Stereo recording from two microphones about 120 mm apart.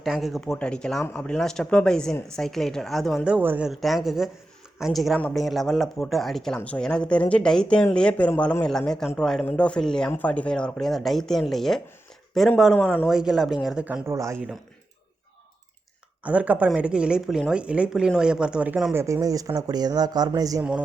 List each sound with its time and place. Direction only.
0.0 s speech: centre (ahead or behind)
3.2 s a woman's voice: 15° right (ahead or behind)
3.7 s speech: centre (ahead or behind)
12.7 s speech: 15° left (ahead or behind)
13.1 s speech: 5° right (ahead or behind)
14.1 s speech: 25° right (ahead or behind)
16.2 s a woman's voice: 10° right (ahead or behind)
18.9 s speech: 25° right (ahead or behind)